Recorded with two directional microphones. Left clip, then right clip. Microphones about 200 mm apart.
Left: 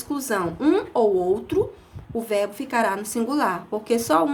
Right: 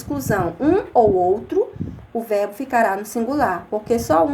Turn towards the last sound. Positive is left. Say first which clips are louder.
# right 3 dB
turn(degrees=20)  # may be behind; listen again after turning